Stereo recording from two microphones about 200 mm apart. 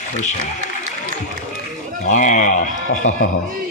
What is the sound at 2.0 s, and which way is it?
Sheep, 40° left (ahead or behind).